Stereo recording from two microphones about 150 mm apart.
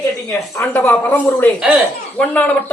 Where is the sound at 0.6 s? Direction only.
15° left (ahead or behind).